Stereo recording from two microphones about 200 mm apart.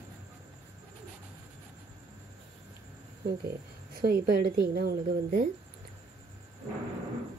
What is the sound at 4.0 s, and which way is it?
A woman's voice, 50° right (ahead or behind).